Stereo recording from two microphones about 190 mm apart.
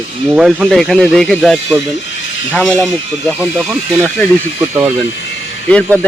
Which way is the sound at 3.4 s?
5° right (ahead or behind).